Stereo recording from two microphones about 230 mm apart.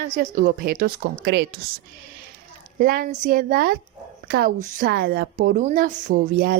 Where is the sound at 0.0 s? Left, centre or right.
Right.